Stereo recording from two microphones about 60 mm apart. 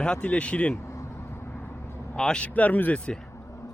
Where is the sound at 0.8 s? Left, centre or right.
Left.